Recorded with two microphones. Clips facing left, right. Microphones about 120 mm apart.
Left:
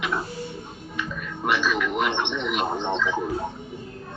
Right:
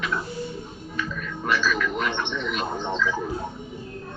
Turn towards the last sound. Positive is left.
turn(degrees=20)  # may be behind; listen again after turning